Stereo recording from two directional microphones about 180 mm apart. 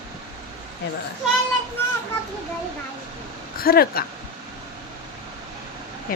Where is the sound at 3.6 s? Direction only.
55° left (ahead or behind).